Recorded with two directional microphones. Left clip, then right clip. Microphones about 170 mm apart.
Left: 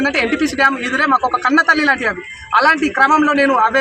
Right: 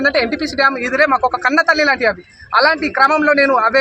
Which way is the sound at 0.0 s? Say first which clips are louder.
Right 1 dB; 20° right (ahead or behind).